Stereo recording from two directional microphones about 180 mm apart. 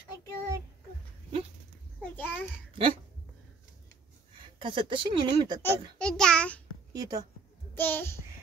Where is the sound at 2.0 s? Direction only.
10° left (ahead or behind).